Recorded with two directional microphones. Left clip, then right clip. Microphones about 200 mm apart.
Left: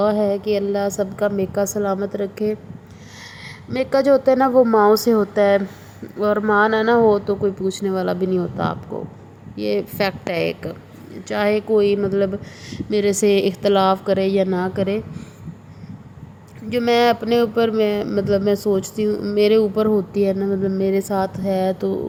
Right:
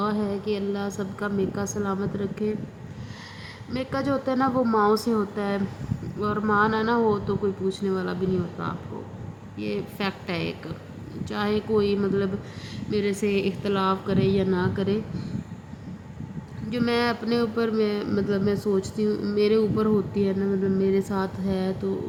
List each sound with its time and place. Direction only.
0.0 s speech: 25° left (ahead or behind)
3.7 s speech: 20° left (ahead or behind)
16.6 s speech: 20° left (ahead or behind)